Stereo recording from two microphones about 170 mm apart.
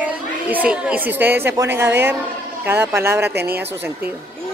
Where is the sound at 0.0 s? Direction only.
10° right (ahead or behind).